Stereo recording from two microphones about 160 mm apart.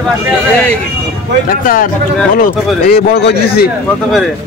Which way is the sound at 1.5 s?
60° left (ahead or behind).